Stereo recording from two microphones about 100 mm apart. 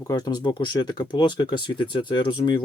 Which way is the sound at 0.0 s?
45° left (ahead or behind).